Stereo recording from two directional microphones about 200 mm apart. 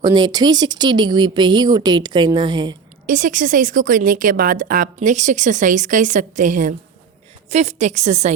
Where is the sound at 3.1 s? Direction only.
40° right (ahead or behind).